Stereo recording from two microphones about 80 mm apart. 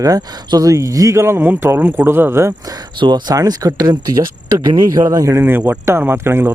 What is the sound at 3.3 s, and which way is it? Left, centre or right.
Speech, right.